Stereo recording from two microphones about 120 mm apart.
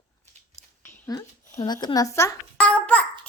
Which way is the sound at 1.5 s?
35° left (ahead or behind).